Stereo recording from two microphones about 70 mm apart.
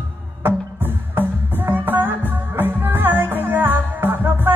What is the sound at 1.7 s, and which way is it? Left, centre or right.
Music, right.